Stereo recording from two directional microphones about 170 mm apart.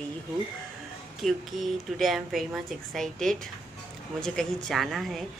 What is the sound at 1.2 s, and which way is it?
A woman's voice, centre (ahead or behind).